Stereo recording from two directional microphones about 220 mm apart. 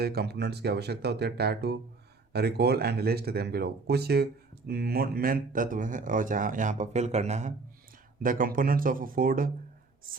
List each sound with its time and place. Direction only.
0.0 s speech: 45° right (ahead or behind)